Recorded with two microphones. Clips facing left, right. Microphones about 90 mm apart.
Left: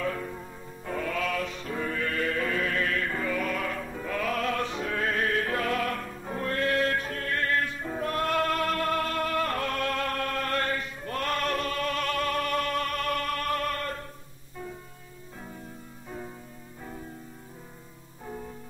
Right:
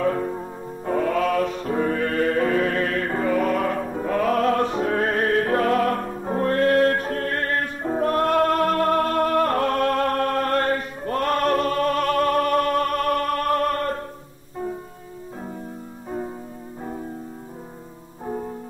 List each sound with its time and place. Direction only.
0.0 s music: 40° right (ahead or behind)
18.2 s music: 40° right (ahead or behind)